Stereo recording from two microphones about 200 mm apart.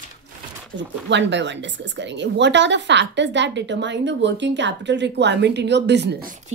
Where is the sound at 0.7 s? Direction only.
60° right (ahead or behind).